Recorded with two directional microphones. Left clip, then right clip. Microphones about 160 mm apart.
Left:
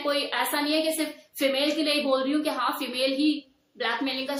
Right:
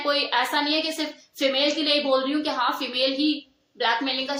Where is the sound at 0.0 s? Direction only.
15° left (ahead or behind).